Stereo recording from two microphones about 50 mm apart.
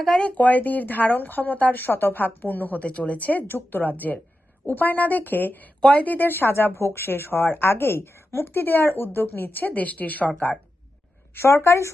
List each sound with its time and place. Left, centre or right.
0.2 s speech: left
11.3 s a woman's voice: left